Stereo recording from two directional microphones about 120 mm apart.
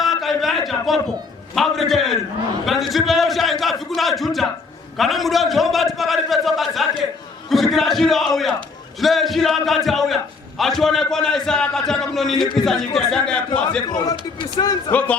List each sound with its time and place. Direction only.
0.0 s a sound: centre (ahead or behind)
1.5 s a man's voice: centre (ahead or behind)
14.6 s speech: 30° left (ahead or behind)
14.9 s speech: 10° left (ahead or behind)